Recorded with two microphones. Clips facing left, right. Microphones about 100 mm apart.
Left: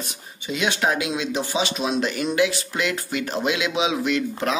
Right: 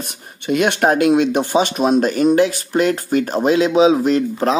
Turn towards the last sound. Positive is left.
turn(degrees=-35)  # may be behind; listen again after turning